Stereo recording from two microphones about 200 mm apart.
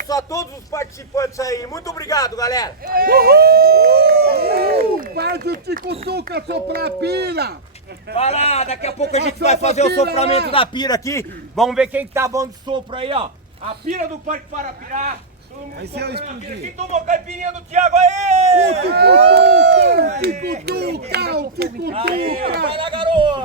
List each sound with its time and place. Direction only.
0.1 s a man's voice: 15° left (ahead or behind)
2.8 s speech: 45° right (ahead or behind)
8.1 s a man's voice: 30° left (ahead or behind); by 11.3 s 15° left (ahead or behind)
11.5 s a man's voice: centre (ahead or behind); by 13.2 s 25° right (ahead or behind)
13.7 s a man's voice: 35° right (ahead or behind)
15.8 s speech: 55° right (ahead or behind)
16.2 s a man's voice: 35° right (ahead or behind)
18.9 s a child's voice: 55° right (ahead or behind)
22.7 s speech: 25° right (ahead or behind)